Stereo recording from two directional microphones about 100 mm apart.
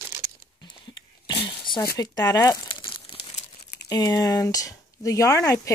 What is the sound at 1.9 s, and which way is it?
Speech, 40° left (ahead or behind).